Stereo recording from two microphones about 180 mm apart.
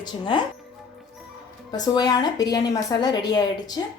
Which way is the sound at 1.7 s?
20° left (ahead or behind).